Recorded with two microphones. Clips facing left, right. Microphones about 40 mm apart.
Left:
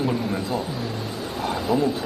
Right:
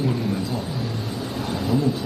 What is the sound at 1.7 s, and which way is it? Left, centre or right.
Speech, centre.